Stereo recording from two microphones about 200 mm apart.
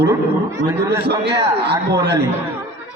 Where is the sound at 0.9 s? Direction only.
55° right (ahead or behind).